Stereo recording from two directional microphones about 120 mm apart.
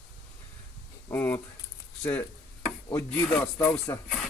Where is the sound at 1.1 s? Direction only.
15° left (ahead or behind).